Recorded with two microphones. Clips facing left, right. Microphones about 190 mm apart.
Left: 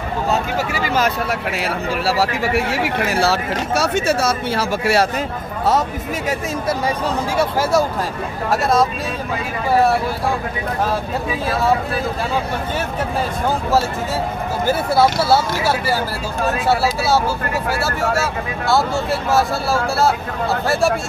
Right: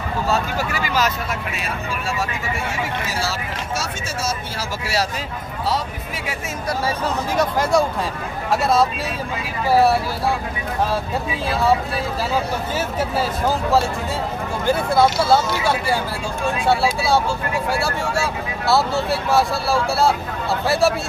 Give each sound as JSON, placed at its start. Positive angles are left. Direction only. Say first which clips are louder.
{"t": 1.6, "sound": "speech", "louder": "left 6 dB", "side_deg": 70}
{"t": 7.3, "sound": "speech", "louder": "left 1 dB", "side_deg": 5}
{"t": 14.7, "sound": "speech", "louder": "even", "side_deg": 5}